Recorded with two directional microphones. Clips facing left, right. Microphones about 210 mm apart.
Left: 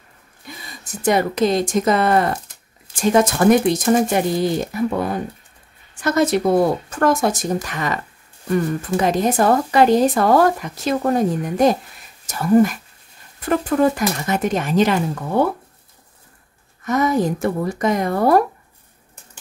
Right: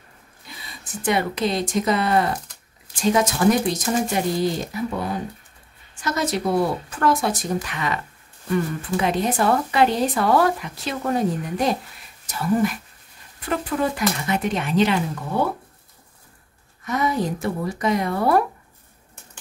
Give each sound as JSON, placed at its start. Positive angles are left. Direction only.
{"t": 1.0, "sound": "speech", "side_deg": 45}
{"t": 16.8, "sound": "speech", "side_deg": 45}